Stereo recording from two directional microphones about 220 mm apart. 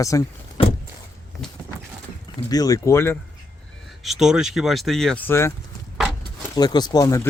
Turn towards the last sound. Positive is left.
turn(degrees=15)  # may be behind; listen again after turning